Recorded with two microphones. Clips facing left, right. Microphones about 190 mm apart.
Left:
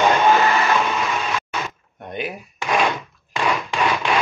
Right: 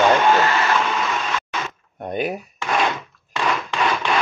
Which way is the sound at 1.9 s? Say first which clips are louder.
Right 5 dB; 40° right (ahead or behind).